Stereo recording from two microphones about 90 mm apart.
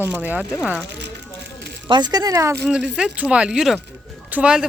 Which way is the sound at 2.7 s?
10° right (ahead or behind).